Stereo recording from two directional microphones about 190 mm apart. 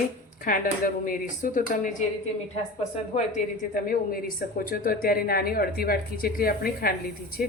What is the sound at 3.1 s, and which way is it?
A woman's voice, 45° left (ahead or behind).